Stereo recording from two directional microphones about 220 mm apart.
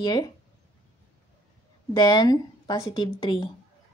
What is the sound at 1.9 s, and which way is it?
Speech, 20° left (ahead or behind).